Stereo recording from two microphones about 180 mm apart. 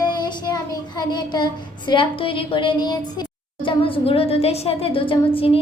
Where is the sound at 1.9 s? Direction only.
30° left (ahead or behind).